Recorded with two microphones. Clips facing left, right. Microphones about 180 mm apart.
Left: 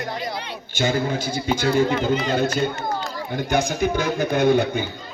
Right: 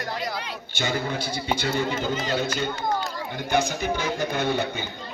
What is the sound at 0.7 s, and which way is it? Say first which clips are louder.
A man's voice: left 6 dB; 50° left (ahead or behind).